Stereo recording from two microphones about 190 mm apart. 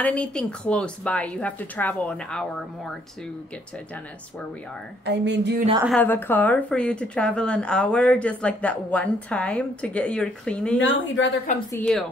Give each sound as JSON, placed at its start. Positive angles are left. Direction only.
{"t": 0.0, "sound": "a woman's voice", "side_deg": 5}
{"t": 5.0, "sound": "speech", "side_deg": -65}
{"t": 5.9, "sound": "speech", "side_deg": 10}
{"t": 10.8, "sound": "a woman's voice", "side_deg": 80}
{"t": 11.8, "sound": "speech", "side_deg": 5}